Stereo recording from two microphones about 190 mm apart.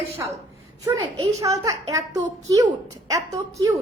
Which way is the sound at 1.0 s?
20° right (ahead or behind).